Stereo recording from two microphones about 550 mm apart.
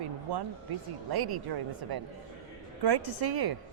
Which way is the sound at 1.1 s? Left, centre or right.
Right.